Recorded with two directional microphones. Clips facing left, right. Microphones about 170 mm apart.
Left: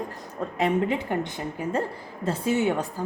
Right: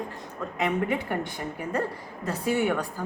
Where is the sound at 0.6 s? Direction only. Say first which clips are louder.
Left 3 dB; 25° left (ahead or behind).